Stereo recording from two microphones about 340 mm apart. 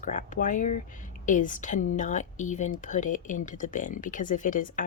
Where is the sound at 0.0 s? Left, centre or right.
Left.